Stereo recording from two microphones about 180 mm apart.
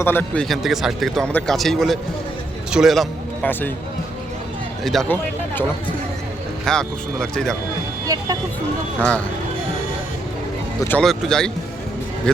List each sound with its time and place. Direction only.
0.0 s a man's voice: 10° left (ahead or behind)
4.8 s a man's voice: centre (ahead or behind)
6.7 s a man's voice: 5° left (ahead or behind)
8.0 s speech: 20° right (ahead or behind)
10.8 s a man's voice: 5° left (ahead or behind)